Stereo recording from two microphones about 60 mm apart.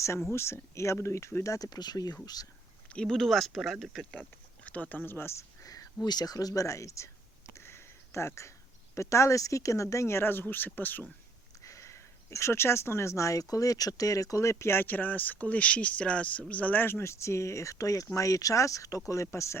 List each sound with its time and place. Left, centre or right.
0.3 s speech: left
1.5 s speech: left
2.9 s speech: centre
4.1 s speech: left
5.6 s a sound: left
6.1 s speech: left
6.5 s speech: left
7.5 s a sound: left
9.0 s speech: left
11.6 s speech: left
17.0 s speech: left